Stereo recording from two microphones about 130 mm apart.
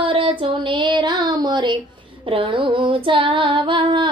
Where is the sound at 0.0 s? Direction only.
40° right (ahead or behind).